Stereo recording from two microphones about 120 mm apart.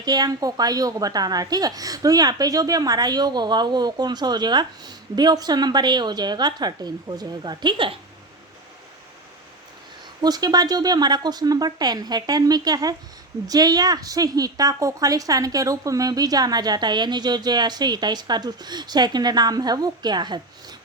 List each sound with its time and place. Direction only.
0.0 s speech: 35° right (ahead or behind)
10.2 s speech: 35° right (ahead or behind)